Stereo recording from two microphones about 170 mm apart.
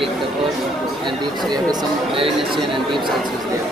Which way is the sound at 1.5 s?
25° right (ahead or behind).